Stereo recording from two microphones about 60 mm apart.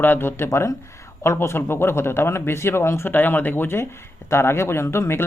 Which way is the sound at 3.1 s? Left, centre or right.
Left.